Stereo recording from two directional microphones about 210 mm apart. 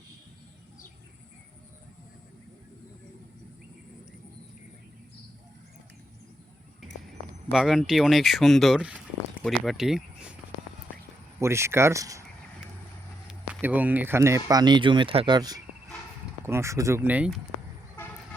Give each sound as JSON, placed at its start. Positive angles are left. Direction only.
{"t": 7.5, "sound": "speech", "side_deg": 0}
{"t": 11.3, "sound": "speech", "side_deg": -10}
{"t": 13.2, "sound": "speech", "side_deg": -5}